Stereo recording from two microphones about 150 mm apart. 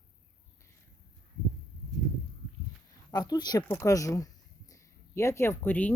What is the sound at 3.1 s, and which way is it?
Speech, 25° left (ahead or behind).